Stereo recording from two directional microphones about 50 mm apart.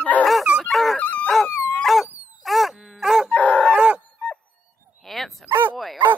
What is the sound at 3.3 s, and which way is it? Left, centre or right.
Dog, left.